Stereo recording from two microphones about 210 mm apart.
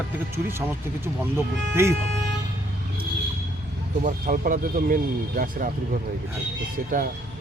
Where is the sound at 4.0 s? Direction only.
40° right (ahead or behind).